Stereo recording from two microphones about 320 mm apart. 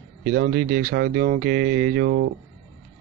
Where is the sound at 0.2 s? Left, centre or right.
Right.